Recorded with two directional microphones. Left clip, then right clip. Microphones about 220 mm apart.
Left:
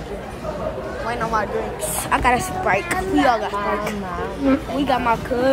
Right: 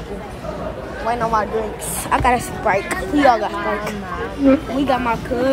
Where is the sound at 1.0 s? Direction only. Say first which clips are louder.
Right 4 dB; 20° right (ahead or behind).